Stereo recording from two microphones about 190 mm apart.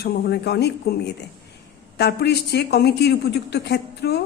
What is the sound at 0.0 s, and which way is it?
Speech, 55° left (ahead or behind).